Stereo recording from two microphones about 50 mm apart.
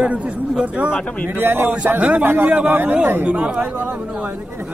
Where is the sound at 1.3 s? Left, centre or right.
Right.